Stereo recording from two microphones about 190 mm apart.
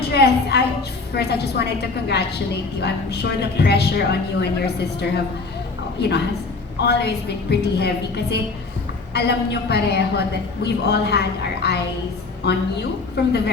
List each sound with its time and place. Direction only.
0.1 s a woman's voice: 60° left (ahead or behind)